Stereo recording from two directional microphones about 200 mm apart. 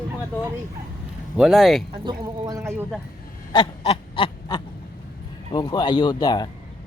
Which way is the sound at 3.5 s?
25° left (ahead or behind).